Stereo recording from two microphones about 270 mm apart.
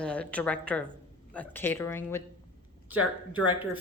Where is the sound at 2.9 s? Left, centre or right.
Right.